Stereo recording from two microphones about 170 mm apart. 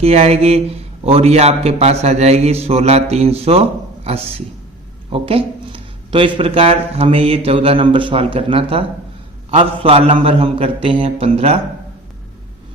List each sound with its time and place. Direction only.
0.0 s speech: 40° right (ahead or behind)